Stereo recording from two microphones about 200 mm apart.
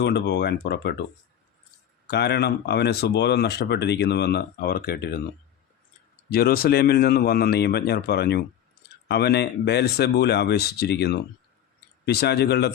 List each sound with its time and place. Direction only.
0.0 s speech: 55° left (ahead or behind)
2.0 s speech: 55° left (ahead or behind)
6.3 s speech: 50° left (ahead or behind)